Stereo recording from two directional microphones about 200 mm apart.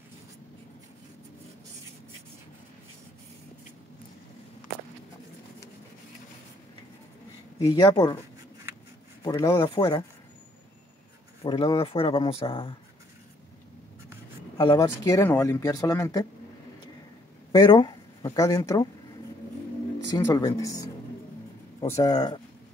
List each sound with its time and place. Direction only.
7.5 s speech: 15° left (ahead or behind)
9.2 s speech: 15° left (ahead or behind)
11.4 s speech: 20° left (ahead or behind)
14.6 s speech: 20° left (ahead or behind)
17.5 s speech: 20° left (ahead or behind)
20.1 s speech: 15° left (ahead or behind)